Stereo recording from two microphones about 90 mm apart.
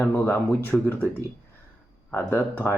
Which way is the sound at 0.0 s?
25° left (ahead or behind).